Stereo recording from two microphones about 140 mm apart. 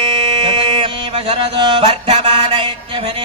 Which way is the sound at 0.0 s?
35° right (ahead or behind).